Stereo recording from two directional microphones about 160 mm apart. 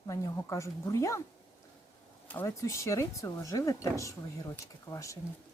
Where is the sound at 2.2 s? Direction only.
15° left (ahead or behind).